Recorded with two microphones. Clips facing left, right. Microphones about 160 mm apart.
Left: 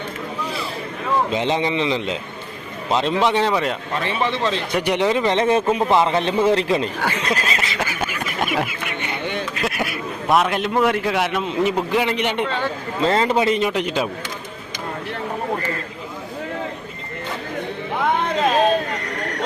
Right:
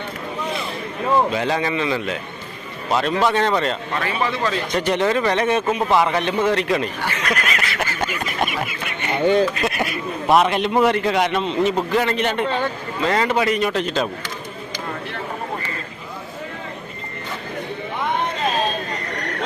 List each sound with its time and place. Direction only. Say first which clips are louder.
1.3 s a man's voice: left 1 dB; 25° left (ahead or behind)
4.0 s a man's voice: left 1 dB; 25° left (ahead or behind)
4.7 s a man's voice: even; 10° left (ahead or behind)
7.2 s a sound: left 1 dB; 30° left (ahead or behind)
7.8 s a sound: even; 10° left (ahead or behind)
9.2 s speech: right 13 dB; 35° right (ahead or behind)
9.6 s a man's voice: right 1 dB; centre (ahead or behind)
13.0 s a man's voice: left 1 dB; 30° left (ahead or behind)
13.7 s speech: even; 15° left (ahead or behind)